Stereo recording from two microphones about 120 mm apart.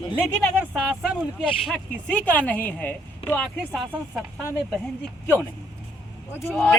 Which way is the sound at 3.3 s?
5° left (ahead or behind).